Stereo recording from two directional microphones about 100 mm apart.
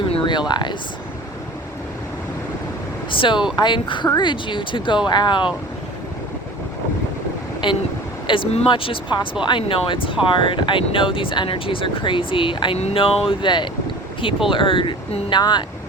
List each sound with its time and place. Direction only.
0.1 s a sound: 55° left (ahead or behind)
3.1 s speech: 55° left (ahead or behind)
7.6 s speech: 50° left (ahead or behind)
12.7 s speech: 80° left
13.4 s speech: 50° left (ahead or behind)